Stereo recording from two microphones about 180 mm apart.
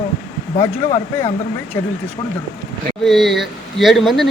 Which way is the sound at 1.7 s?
20° left (ahead or behind).